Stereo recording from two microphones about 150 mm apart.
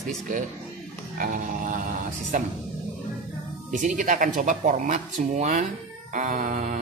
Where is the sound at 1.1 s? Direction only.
65° right (ahead or behind).